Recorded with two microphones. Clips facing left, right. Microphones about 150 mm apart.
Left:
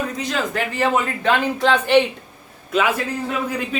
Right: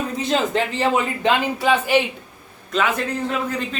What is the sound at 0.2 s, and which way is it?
Speech, 25° right (ahead or behind).